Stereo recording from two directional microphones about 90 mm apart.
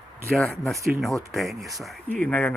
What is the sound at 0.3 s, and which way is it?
Speech, 10° left (ahead or behind).